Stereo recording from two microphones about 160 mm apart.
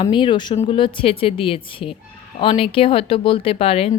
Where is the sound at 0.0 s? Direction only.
30° left (ahead or behind).